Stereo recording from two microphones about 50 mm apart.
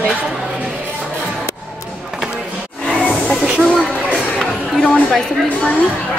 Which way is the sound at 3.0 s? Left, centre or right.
Left.